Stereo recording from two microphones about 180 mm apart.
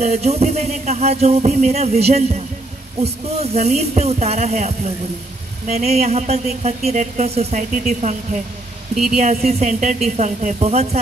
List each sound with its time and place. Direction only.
0.0 s speech: 35° right (ahead or behind)